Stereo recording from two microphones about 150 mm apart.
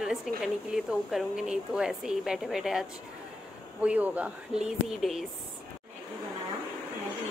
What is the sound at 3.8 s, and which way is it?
Speech, 10° right (ahead or behind).